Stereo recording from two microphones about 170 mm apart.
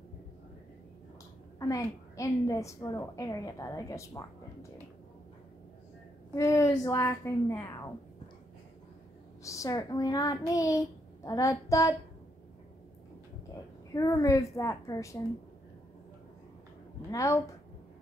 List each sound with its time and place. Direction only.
1.6 s a woman's voice: 20° left (ahead or behind)
6.3 s a woman's voice: 15° left (ahead or behind)
9.4 s a woman's voice: 20° left (ahead or behind)
13.9 s a woman's voice: 20° left (ahead or behind)
17.1 s a woman's voice: 20° left (ahead or behind)